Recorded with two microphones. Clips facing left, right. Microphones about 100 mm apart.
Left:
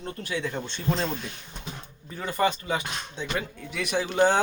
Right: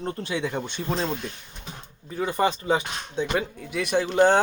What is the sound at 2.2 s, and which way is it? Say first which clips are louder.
Speech: right 2 dB; 25° right (ahead or behind).